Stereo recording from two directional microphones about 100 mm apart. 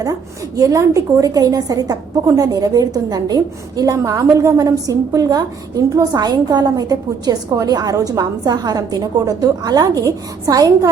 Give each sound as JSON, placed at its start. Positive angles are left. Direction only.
{"t": 0.0, "sound": "a woman's voice", "side_deg": -35}